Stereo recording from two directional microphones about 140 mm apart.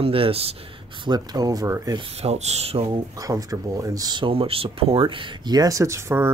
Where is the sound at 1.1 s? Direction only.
25° right (ahead or behind).